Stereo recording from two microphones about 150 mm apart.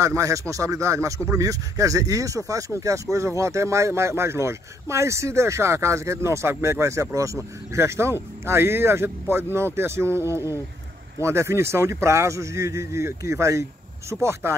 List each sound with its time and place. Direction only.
0.0 s speech: 20° right (ahead or behind)